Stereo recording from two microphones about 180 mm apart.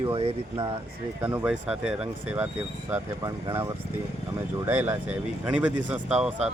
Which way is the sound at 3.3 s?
20° right (ahead or behind).